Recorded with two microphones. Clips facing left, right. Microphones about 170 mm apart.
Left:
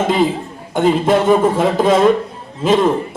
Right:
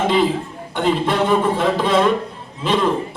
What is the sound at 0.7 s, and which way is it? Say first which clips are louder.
A man's voice: left 5 dB; 45° left (ahead or behind).